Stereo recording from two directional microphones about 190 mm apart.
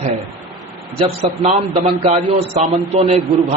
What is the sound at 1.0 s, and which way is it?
A man's voice, 35° right (ahead or behind).